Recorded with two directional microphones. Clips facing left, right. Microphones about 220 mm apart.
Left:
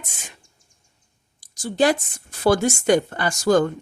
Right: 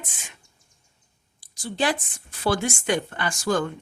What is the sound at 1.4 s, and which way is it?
Speech, 45° left (ahead or behind).